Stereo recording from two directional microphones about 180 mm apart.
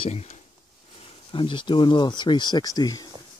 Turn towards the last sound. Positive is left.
turn(degrees=20)  # may be behind; listen again after turning